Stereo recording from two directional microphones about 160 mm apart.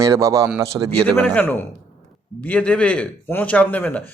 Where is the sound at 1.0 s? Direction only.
10° left (ahead or behind).